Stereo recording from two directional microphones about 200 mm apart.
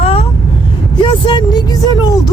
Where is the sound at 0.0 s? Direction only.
30° left (ahead or behind).